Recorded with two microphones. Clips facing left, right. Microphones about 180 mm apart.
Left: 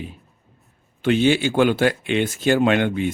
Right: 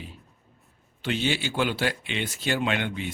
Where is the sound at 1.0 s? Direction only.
55° left (ahead or behind).